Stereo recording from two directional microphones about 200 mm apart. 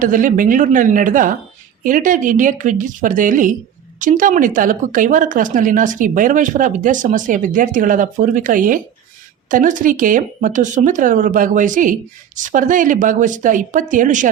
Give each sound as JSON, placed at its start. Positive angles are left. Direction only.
{"t": 0.0, "sound": "speech", "side_deg": -40}